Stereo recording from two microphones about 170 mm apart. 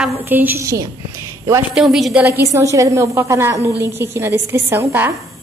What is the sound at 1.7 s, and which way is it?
Speech, 5° right (ahead or behind).